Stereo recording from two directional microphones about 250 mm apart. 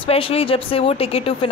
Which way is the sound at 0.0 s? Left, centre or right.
Left.